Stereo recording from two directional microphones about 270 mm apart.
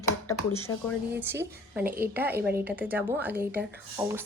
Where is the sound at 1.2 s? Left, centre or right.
Centre.